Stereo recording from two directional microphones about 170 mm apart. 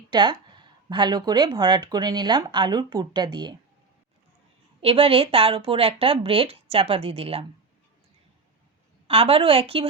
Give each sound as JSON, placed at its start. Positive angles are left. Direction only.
{"t": 0.1, "sound": "speech", "side_deg": -25}
{"t": 4.8, "sound": "speech", "side_deg": -35}
{"t": 9.0, "sound": "speech", "side_deg": -35}